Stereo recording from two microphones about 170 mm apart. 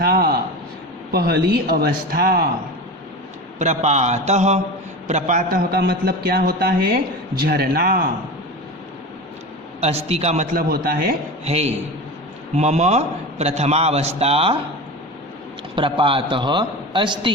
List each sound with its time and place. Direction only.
0.0 s a sound: 60° right (ahead or behind)
1.1 s a man's voice: 65° right (ahead or behind)
3.6 s a man's voice: 40° right (ahead or behind)
5.5 s a man's voice: 65° right (ahead or behind)
10.1 s a man's voice: 40° right (ahead or behind); by 11.1 s 60° right (ahead or behind)
11.4 s a man's voice: 40° right (ahead or behind)
15.7 s a man's voice: 30° right (ahead or behind)